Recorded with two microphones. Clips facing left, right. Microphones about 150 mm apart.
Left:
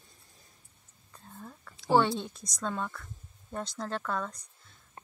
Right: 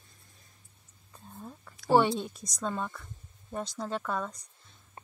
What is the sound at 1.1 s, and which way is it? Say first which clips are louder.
Whispering: right 2 dB; 15° right (ahead or behind).